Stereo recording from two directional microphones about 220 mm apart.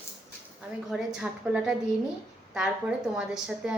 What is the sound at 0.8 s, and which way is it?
A woman's voice, 5° right (ahead or behind).